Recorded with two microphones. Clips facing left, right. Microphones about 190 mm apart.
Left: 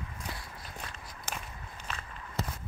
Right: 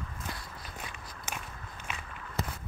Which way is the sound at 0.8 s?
10° right (ahead or behind).